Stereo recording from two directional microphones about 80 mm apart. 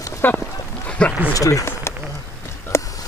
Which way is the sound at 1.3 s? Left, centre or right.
Left.